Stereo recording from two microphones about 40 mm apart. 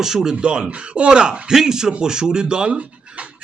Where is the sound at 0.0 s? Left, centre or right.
Centre.